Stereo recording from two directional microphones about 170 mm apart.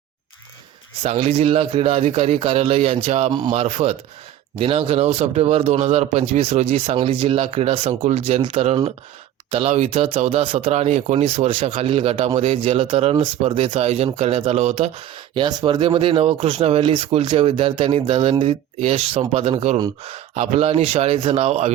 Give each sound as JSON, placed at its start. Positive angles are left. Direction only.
{"t": 1.0, "sound": "speech", "side_deg": -40}
{"t": 8.4, "sound": "speech", "side_deg": -30}
{"t": 8.6, "sound": "speech", "side_deg": -40}